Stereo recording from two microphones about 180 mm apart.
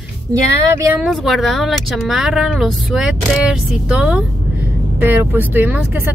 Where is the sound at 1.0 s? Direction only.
Centre (ahead or behind).